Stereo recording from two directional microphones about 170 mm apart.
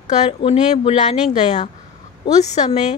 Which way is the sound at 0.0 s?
40° left (ahead or behind).